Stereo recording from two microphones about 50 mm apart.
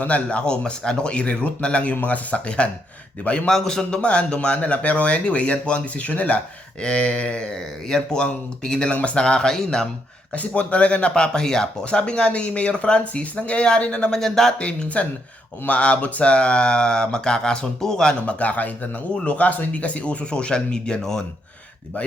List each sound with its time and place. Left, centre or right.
0.0 s speech: left
3.5 s speech: centre
4.0 s speech: left
10.3 s speech: left; by 14.5 s centre
14.6 s speech: left
18.3 s speech: left; by 21.2 s centre